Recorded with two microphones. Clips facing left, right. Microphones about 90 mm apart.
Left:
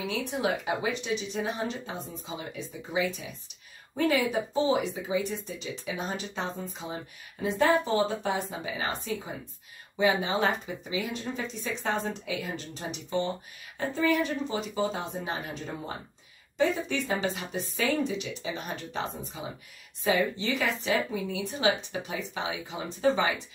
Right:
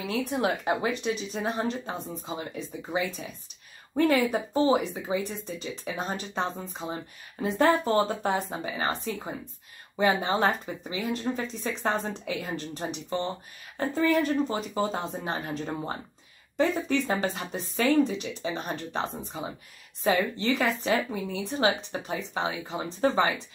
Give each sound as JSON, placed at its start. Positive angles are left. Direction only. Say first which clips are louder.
{"t": 0.0, "sound": "a woman's voice", "louder": "right 2 dB", "side_deg": -45}
{"t": 7.4, "sound": "speech", "louder": "right 1 dB", "side_deg": -45}
{"t": 9.9, "sound": "a woman's voice", "louder": "right 1 dB", "side_deg": -45}